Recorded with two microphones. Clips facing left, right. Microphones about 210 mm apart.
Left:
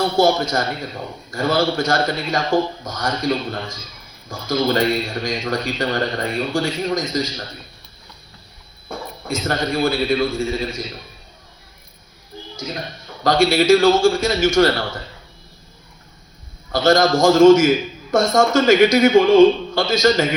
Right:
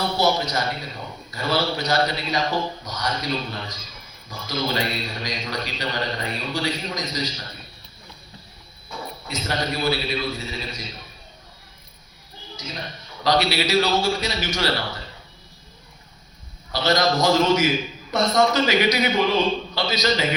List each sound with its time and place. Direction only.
0.2 s a man's voice: 50° left (ahead or behind)
8.9 s a man's voice: 50° left (ahead or behind)
13.2 s a man's voice: 50° left (ahead or behind)
16.7 s a man's voice: 50° left (ahead or behind)